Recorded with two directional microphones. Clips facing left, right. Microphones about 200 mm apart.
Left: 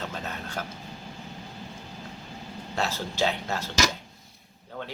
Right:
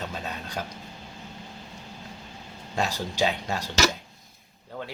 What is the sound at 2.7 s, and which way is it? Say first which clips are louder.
Speech: right 2 dB; 15° right (ahead or behind).